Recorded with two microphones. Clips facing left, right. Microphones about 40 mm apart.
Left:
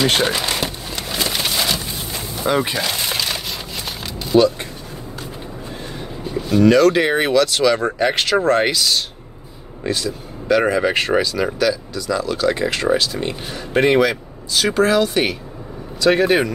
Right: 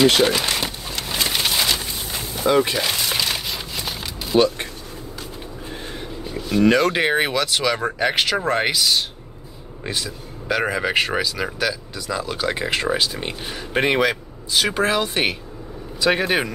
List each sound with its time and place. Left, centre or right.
0.5 s a sound: centre
2.4 s speech: centre
3.1 s a sound: centre
6.6 s speech: centre
11.9 s speech: centre
16.0 s speech: centre